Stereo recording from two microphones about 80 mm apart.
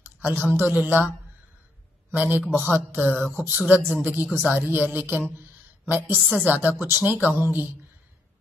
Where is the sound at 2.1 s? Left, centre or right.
Right.